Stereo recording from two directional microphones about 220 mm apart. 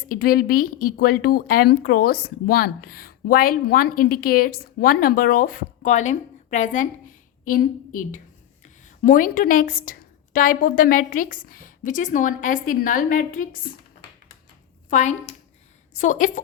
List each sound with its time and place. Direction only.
0.1 s a woman's voice: 40° left (ahead or behind)
14.8 s a woman's voice: 35° left (ahead or behind)